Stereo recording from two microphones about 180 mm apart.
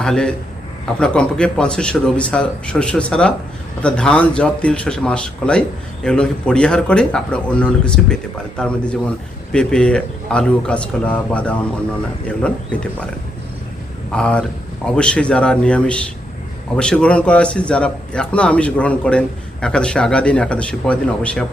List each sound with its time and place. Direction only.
0.0 s speech: 5° left (ahead or behind)
14.1 s speech: 5° left (ahead or behind)